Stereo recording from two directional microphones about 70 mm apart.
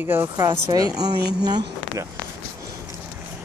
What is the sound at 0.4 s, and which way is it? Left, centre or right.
Speech, right.